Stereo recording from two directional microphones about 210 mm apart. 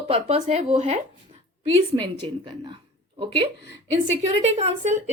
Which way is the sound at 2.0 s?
25° right (ahead or behind).